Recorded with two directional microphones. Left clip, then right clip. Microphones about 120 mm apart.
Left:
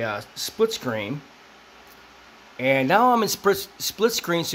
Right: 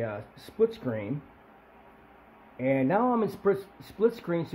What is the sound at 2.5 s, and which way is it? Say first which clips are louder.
Speech: left 7 dB; 35° left (ahead or behind).